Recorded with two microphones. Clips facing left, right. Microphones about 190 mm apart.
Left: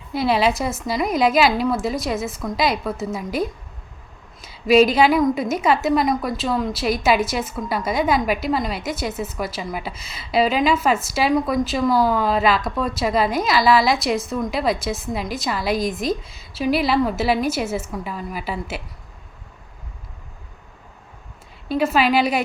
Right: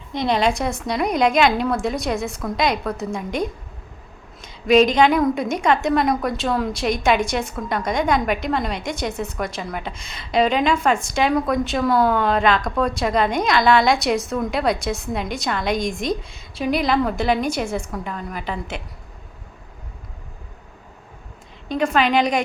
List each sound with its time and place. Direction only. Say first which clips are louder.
0.1 s a woman's voice: left 1 dB; 5° left (ahead or behind)
21.7 s a woman's voice: left 1 dB; 5° left (ahead or behind)